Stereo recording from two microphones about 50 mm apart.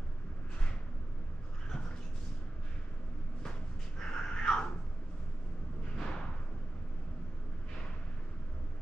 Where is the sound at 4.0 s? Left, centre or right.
Centre.